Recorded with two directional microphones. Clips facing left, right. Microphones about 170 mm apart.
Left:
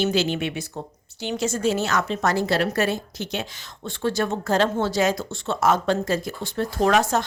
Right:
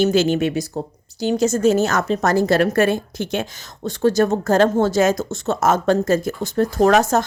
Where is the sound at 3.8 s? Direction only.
40° right (ahead or behind).